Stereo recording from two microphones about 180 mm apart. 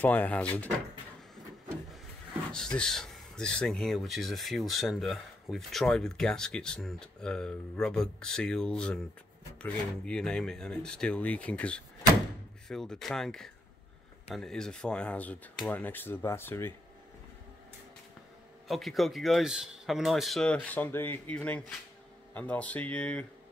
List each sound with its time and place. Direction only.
0.0 s speech: 10° left (ahead or behind)
2.5 s speech: 5° left (ahead or behind)
18.7 s speech: centre (ahead or behind)